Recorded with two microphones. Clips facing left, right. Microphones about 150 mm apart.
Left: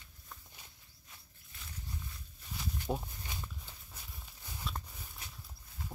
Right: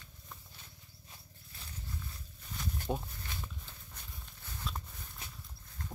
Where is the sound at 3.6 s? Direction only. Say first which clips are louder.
Right 1 dB; 10° left (ahead or behind).